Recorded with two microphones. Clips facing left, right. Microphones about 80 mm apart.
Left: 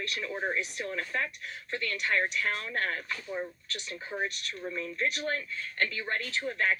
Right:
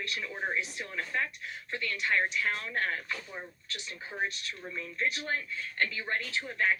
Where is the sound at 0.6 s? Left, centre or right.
Right.